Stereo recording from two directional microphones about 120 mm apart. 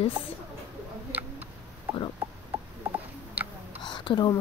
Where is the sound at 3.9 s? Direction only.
40° left (ahead or behind).